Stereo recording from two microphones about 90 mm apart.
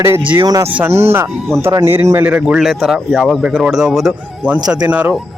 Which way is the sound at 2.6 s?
Centre (ahead or behind).